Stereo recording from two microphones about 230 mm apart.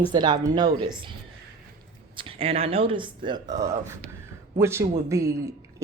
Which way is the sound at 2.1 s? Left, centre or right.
Right.